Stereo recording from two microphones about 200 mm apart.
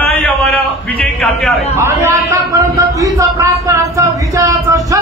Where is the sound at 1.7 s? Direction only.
15° right (ahead or behind).